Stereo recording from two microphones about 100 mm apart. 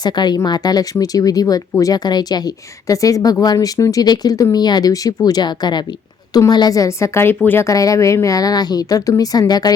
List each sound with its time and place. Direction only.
0.0 s a woman's voice: 45° left (ahead or behind)
3.8 s a woman's voice: 30° left (ahead or behind)
4.0 s a woman's voice: 45° left (ahead or behind)